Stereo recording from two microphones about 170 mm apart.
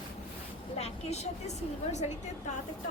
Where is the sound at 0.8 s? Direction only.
40° left (ahead or behind).